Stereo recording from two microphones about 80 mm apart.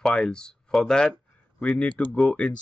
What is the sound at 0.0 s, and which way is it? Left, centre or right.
Speech, centre.